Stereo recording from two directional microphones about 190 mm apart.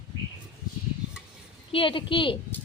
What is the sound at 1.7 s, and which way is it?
Speech, 25° left (ahead or behind).